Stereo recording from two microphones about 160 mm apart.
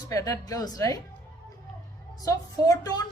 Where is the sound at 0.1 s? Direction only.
20° left (ahead or behind).